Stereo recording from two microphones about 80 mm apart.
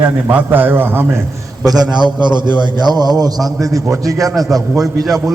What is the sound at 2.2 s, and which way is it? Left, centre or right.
Speech, right.